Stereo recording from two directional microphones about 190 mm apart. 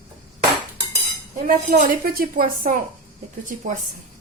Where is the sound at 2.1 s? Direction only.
50° right (ahead or behind).